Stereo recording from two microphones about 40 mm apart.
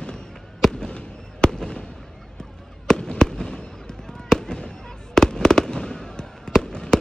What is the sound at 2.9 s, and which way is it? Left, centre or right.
Fireworks, centre.